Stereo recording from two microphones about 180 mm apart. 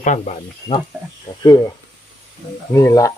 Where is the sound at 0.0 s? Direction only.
45° left (ahead or behind).